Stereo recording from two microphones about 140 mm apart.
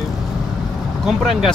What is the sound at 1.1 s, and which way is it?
Speech, centre (ahead or behind).